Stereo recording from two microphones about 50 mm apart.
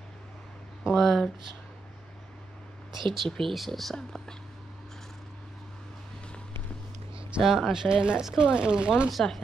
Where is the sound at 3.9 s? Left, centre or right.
Centre.